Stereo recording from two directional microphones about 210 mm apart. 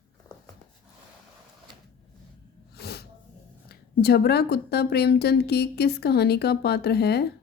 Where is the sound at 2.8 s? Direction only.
50° left (ahead or behind).